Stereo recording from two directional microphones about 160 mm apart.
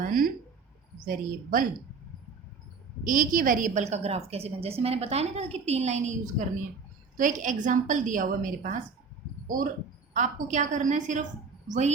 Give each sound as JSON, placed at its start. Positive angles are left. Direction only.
{"t": 0.0, "sound": "a sound", "side_deg": -65}
{"t": 0.9, "sound": "a woman's voice", "side_deg": -60}
{"t": 3.0, "sound": "a woman's voice", "side_deg": -60}
{"t": 10.2, "sound": "a woman's voice", "side_deg": -50}